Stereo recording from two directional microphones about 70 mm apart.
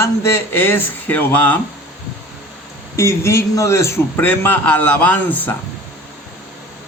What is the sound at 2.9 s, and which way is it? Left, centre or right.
A man's voice, left.